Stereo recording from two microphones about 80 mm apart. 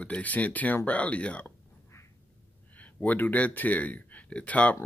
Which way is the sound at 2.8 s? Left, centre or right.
Centre.